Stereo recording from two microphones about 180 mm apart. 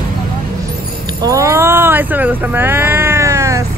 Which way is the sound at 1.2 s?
15° right (ahead or behind).